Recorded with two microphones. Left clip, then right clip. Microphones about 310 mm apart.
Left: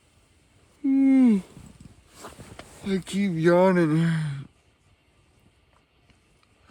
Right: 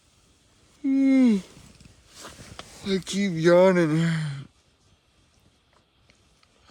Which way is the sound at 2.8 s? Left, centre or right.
Centre.